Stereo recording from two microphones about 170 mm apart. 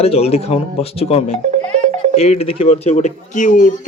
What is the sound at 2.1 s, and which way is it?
Speech, 40° left (ahead or behind).